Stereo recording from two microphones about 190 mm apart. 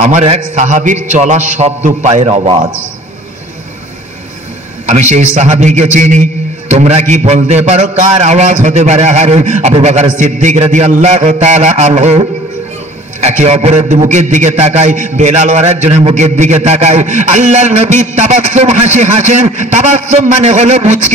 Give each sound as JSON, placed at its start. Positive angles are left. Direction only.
{"t": 0.0, "sound": "a man's voice", "side_deg": -35}
{"t": 4.8, "sound": "a man's voice", "side_deg": -40}